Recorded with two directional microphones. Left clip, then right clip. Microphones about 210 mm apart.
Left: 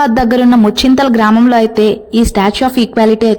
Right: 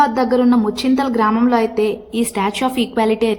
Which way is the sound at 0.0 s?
40° left (ahead or behind).